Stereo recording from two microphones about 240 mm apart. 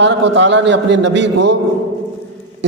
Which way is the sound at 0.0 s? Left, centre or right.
Right.